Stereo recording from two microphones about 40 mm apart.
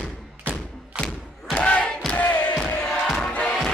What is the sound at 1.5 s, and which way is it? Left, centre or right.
Crowd, left.